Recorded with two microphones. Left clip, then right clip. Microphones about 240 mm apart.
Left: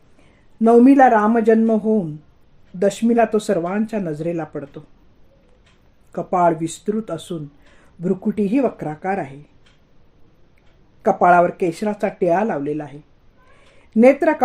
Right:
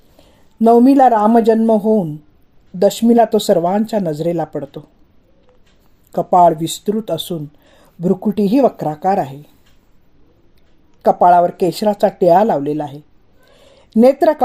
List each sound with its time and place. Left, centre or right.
0.6 s speech: right
6.3 s speech: right
11.0 s speech: right